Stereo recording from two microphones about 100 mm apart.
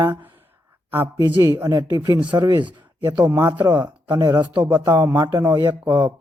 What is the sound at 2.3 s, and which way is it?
Speech, 45° right (ahead or behind).